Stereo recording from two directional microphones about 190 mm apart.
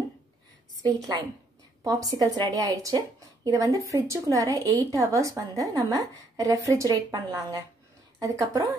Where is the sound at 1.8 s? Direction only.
20° right (ahead or behind).